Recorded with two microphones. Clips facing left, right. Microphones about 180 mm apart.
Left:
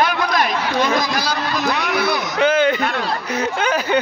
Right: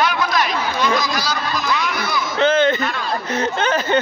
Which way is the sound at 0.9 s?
55° left (ahead or behind).